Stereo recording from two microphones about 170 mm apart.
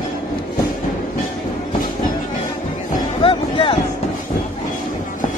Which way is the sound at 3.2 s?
30° left (ahead or behind).